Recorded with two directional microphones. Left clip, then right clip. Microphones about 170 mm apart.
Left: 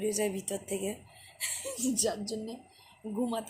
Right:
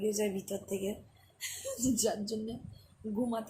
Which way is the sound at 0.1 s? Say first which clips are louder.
Left 1 dB; 15° left (ahead or behind).